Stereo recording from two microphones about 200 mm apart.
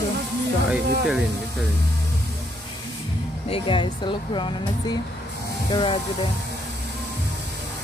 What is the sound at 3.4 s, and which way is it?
Speech, 25° left (ahead or behind).